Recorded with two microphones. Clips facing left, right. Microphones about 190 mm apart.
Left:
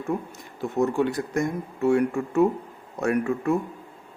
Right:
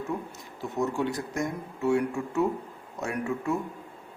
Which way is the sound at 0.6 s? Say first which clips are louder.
Left 5 dB; 55° left (ahead or behind).